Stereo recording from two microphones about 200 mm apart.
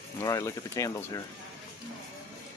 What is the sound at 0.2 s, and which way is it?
Speech, 15° left (ahead or behind).